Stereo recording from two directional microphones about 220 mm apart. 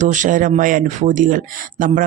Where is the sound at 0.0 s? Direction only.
35° right (ahead or behind).